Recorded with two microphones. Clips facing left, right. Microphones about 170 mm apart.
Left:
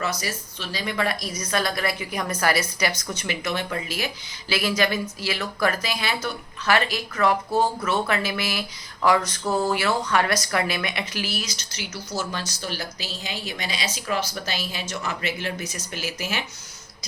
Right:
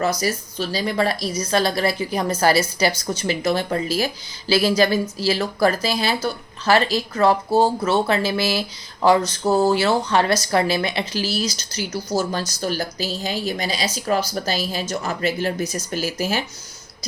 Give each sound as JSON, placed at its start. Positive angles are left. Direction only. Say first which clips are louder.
{"t": 0.0, "sound": "speech", "louder": "right 7 dB", "side_deg": -40}